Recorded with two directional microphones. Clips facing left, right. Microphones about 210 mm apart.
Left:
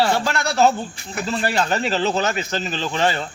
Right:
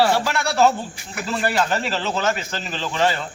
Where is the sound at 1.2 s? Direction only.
25° left (ahead or behind).